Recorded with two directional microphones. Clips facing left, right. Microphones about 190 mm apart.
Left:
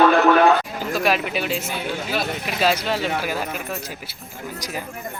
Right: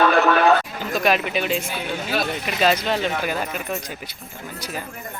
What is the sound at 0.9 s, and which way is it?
A man's voice, 5° left (ahead or behind).